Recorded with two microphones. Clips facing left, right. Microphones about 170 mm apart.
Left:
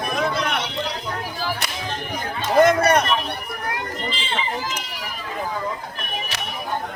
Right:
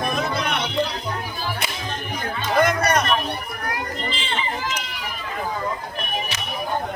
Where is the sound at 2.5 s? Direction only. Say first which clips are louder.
Left 4 dB; 25° left (ahead or behind).